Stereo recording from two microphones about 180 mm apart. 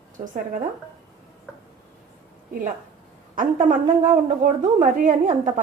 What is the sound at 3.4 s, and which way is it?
A woman's voice, 45° right (ahead or behind).